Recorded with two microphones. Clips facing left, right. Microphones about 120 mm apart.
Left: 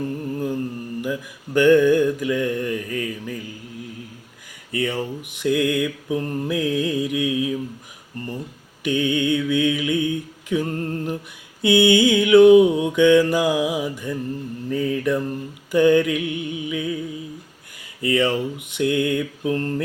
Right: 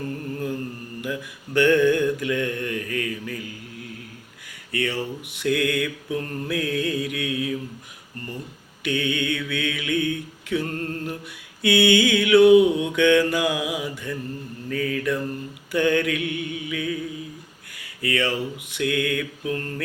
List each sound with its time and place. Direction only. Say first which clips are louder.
0.3 s mantra: left 4 dB; 15° left (ahead or behind)
4.9 s mantra: left 2 dB; 15° left (ahead or behind)
8.9 s mantra: left 5 dB; 20° left (ahead or behind)
18.0 s mantra: left 4 dB; 20° left (ahead or behind)